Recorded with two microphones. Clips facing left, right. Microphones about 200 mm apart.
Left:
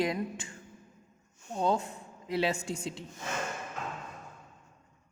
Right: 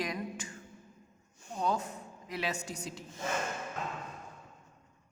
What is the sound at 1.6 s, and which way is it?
Speech, 30° left (ahead or behind).